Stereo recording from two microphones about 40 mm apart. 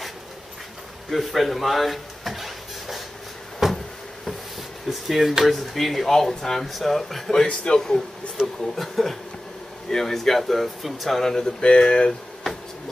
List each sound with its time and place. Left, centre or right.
1.1 s speech: centre
3.6 s cupboard open or close: centre
4.8 s speech: centre
8.7 s speech: centre